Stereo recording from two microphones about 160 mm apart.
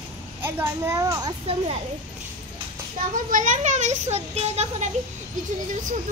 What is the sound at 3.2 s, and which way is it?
Speech, 55° right (ahead or behind).